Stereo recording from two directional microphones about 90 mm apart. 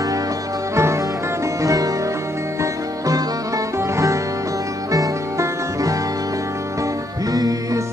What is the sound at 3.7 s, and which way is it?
Music, 35° right (ahead or behind).